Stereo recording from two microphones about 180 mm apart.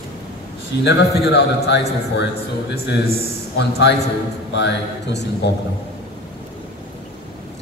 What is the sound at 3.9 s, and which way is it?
A man's voice, 70° left (ahead or behind).